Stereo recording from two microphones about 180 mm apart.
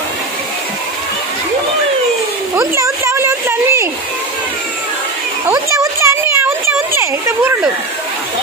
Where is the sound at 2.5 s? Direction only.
15° right (ahead or behind).